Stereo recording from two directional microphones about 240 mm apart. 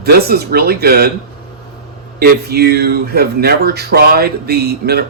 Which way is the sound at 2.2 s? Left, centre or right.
Right.